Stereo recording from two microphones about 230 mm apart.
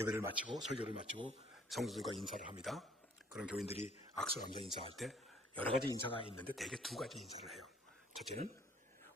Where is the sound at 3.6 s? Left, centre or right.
Left.